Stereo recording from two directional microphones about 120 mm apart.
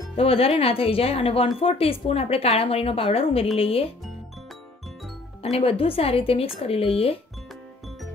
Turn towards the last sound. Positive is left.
turn(degrees=55)  # may be behind; listen again after turning